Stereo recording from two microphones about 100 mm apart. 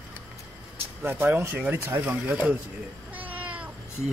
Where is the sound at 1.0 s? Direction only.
20° right (ahead or behind).